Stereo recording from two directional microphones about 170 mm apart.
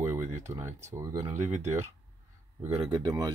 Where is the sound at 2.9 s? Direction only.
25° right (ahead or behind).